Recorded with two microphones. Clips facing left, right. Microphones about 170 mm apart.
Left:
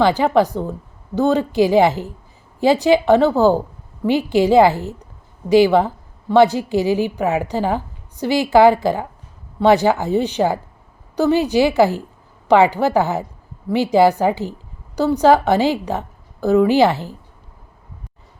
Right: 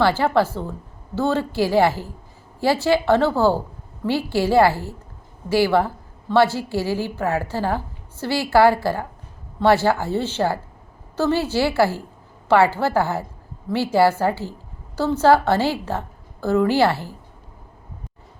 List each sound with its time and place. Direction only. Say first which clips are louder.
0.0 s a woman's voice: left 3 dB; 15° left (ahead or behind)